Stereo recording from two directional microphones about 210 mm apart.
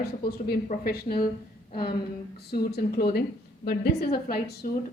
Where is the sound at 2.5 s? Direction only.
45° left (ahead or behind).